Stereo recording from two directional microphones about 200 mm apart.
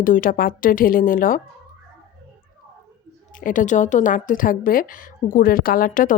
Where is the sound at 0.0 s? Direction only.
45° left (ahead or behind).